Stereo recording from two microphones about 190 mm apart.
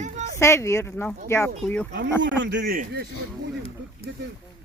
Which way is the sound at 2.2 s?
65° right (ahead or behind).